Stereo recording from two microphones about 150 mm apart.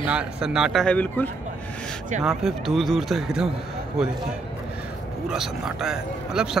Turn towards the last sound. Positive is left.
turn(degrees=-5)  # may be behind; listen again after turning